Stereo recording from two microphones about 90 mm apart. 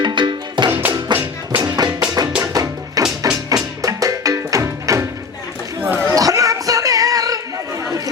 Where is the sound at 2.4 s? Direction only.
45° right (ahead or behind).